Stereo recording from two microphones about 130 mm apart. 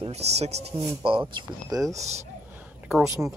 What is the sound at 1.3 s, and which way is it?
Speech, 35° right (ahead or behind).